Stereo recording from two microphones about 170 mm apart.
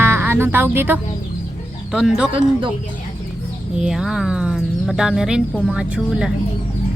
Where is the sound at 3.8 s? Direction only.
5° right (ahead or behind).